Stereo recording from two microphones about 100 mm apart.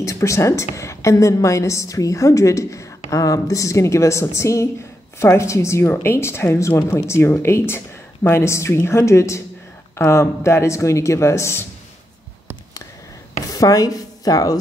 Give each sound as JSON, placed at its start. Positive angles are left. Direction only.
{"t": 0.0, "sound": "a woman's voice", "side_deg": 30}
{"t": 13.5, "sound": "speech", "side_deg": 35}